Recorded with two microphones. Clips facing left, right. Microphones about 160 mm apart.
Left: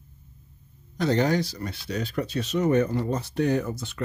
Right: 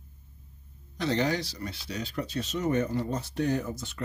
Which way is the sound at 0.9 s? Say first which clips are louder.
Left 5 dB; 45° left (ahead or behind).